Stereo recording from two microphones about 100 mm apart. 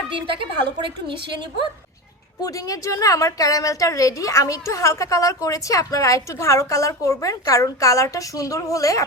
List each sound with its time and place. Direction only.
0.1 s a woman's voice: 55° right (ahead or behind)
2.4 s a woman's voice: 35° left (ahead or behind)